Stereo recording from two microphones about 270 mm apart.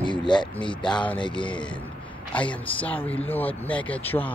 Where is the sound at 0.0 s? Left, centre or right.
Centre.